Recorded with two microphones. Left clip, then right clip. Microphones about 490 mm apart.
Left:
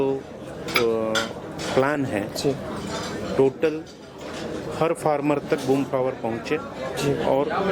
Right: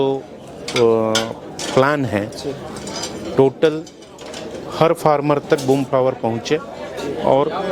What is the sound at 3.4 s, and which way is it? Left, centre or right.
Speech, right.